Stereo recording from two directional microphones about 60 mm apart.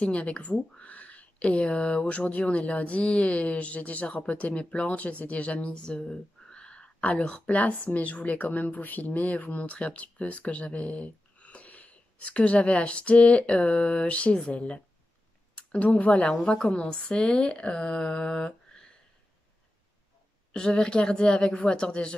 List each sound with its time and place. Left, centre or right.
0.0 s speech: centre
16.8 s speech: centre
20.5 s speech: centre